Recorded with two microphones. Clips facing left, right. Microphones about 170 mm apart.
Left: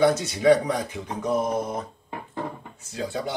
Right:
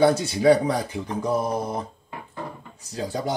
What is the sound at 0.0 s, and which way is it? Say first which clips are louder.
Speech: right 2 dB; 30° right (ahead or behind).